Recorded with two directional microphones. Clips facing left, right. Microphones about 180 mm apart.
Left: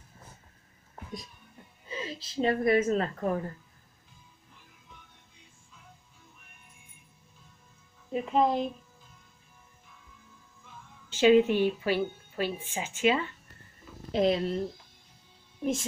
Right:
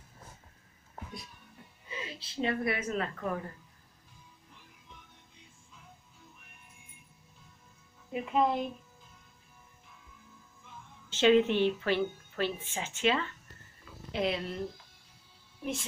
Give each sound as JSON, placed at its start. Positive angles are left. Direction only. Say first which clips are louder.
{"t": 1.9, "sound": "a woman's voice", "louder": "left 5 dB", "side_deg": 35}
{"t": 8.1, "sound": "music", "louder": "left 3 dB", "side_deg": 30}
{"t": 11.1, "sound": "a woman's voice", "louder": "left 3 dB", "side_deg": 10}
{"t": 14.1, "sound": "speech", "louder": "left 7 dB", "side_deg": 40}